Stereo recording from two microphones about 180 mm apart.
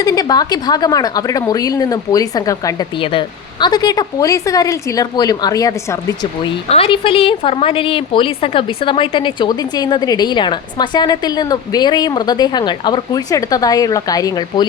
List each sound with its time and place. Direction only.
0.0 s a woman's voice: 20° left (ahead or behind)
6.7 s a woman's voice: 30° left (ahead or behind)